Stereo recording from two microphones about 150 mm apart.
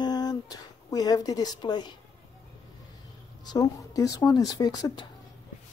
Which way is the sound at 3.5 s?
25° left (ahead or behind).